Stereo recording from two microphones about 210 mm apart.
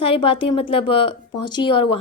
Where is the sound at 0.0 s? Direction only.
25° left (ahead or behind).